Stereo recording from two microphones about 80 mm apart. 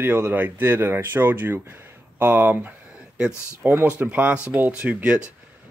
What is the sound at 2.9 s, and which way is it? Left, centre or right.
Speech, centre.